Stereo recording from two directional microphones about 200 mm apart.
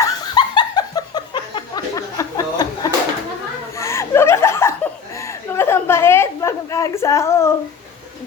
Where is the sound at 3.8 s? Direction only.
15° left (ahead or behind).